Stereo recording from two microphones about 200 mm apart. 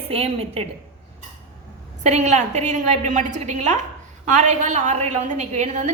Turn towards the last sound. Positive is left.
turn(degrees=-35)  # may be behind; listen again after turning